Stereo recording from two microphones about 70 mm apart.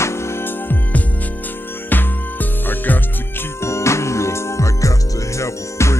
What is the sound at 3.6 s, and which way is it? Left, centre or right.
Music, left.